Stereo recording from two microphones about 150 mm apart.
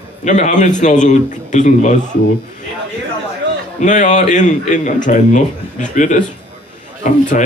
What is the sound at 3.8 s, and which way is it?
A man's voice, 55° left (ahead or behind).